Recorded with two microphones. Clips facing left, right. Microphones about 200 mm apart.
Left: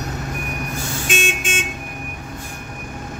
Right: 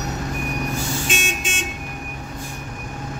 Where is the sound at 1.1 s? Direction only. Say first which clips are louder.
Left 3 dB; 55° left (ahead or behind).